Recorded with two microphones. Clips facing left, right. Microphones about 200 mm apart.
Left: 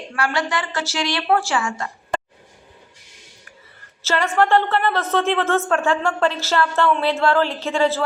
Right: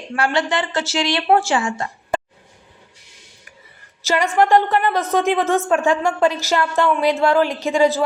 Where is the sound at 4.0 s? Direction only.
15° right (ahead or behind).